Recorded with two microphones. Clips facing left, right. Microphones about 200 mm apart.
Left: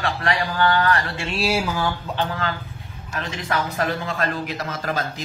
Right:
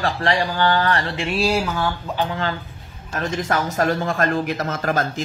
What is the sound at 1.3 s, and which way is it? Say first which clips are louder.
Speech: right 2 dB; centre (ahead or behind).